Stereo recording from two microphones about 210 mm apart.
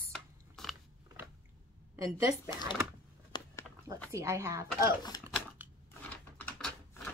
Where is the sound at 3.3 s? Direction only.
20° left (ahead or behind).